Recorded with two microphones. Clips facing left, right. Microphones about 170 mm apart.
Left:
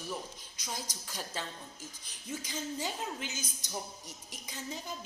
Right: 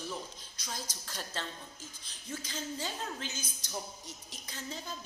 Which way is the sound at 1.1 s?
10° left (ahead or behind).